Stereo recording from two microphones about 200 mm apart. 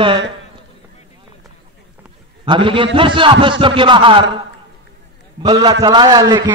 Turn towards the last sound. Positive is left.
turn(degrees=-20)  # may be behind; listen again after turning